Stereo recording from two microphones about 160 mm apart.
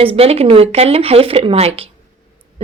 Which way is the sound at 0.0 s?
35° right (ahead or behind).